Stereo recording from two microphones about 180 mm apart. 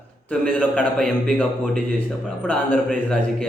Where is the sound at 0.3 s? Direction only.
5° left (ahead or behind).